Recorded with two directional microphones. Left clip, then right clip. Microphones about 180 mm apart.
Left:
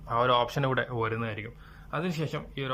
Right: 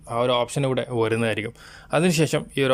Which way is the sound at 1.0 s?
45° right (ahead or behind).